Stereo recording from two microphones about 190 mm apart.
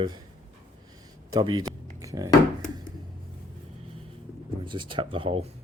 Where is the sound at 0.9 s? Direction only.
20° right (ahead or behind).